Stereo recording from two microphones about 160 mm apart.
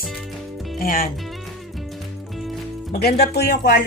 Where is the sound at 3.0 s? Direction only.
85° left.